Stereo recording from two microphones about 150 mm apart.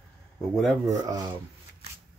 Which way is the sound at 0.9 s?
25° right (ahead or behind).